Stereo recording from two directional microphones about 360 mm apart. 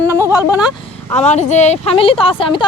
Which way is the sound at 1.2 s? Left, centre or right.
Centre.